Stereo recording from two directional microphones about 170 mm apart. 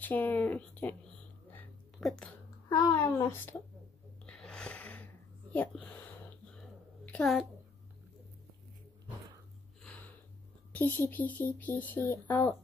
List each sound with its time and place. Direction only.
0.0 s speech: 10° left (ahead or behind)
2.0 s speech: 5° left (ahead or behind)
2.7 s speech: 20° left (ahead or behind)
4.3 s a sound: 5° left (ahead or behind)
7.1 s a child's voice: 5° left (ahead or behind)
9.8 s a sound: 5° left (ahead or behind)
10.7 s speech: 10° left (ahead or behind)